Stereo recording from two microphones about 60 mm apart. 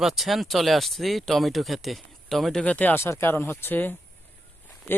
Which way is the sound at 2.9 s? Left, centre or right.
Left.